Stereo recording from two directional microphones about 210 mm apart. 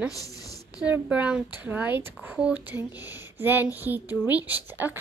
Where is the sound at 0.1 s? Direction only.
15° left (ahead or behind).